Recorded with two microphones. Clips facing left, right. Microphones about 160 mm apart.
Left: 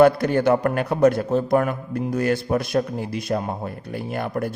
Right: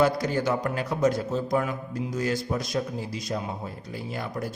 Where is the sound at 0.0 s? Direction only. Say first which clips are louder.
Left 7 dB; 60° left (ahead or behind).